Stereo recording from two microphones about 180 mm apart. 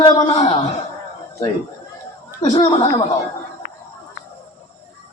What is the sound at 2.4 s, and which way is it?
Speech, 25° left (ahead or behind).